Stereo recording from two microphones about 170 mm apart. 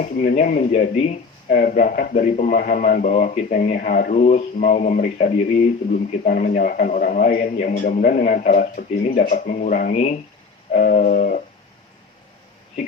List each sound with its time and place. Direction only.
0.0 s a man's voice: 50° left (ahead or behind)
1.5 s a man's voice: 60° left (ahead or behind); by 3.8 s 40° left (ahead or behind)
3.8 s a man's voice: 60° left (ahead or behind)
9.9 s speech: 40° left (ahead or behind)
10.7 s a man's voice: 55° left (ahead or behind)